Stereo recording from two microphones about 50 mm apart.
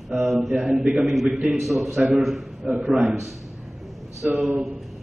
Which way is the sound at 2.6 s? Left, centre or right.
Centre.